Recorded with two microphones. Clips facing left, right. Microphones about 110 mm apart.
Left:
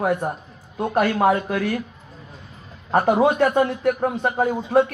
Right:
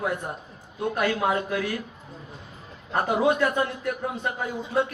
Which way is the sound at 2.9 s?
55° left (ahead or behind).